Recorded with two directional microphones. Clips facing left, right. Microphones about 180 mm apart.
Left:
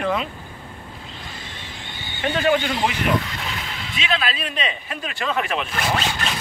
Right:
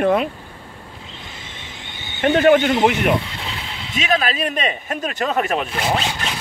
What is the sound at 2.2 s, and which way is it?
Speech, 60° right (ahead or behind).